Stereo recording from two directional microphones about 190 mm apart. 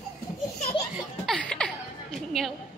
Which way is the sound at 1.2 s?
5° left (ahead or behind).